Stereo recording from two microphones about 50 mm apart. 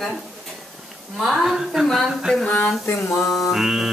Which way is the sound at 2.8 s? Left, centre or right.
Left.